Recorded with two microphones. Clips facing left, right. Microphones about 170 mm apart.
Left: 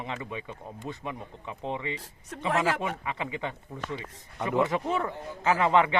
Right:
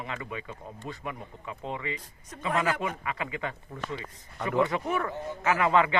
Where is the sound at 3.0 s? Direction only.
20° left (ahead or behind).